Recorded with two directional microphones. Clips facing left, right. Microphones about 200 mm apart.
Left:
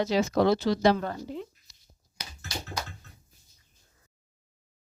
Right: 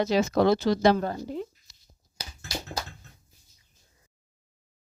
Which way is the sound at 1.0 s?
40° right (ahead or behind).